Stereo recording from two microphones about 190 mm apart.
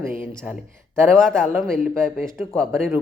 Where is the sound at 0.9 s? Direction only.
5° left (ahead or behind).